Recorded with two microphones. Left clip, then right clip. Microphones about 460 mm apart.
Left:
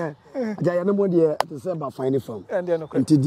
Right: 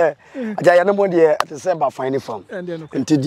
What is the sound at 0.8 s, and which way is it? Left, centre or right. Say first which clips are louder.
Speech: right 6 dB; right.